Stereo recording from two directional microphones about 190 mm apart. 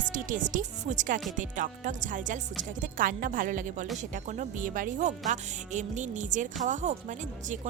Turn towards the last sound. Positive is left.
turn(degrees=-40)  # may be behind; listen again after turning